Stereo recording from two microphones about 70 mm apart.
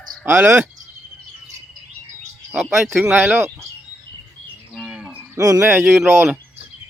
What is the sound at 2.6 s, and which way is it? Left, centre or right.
Speech, centre.